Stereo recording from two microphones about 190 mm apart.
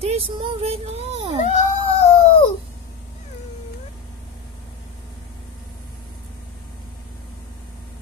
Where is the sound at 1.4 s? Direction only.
35° left (ahead or behind).